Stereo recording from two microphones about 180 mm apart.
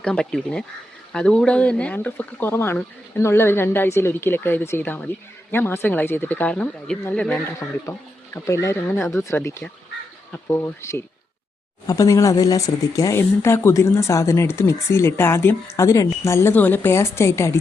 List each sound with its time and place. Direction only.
0.0 s speech: 5° left (ahead or behind)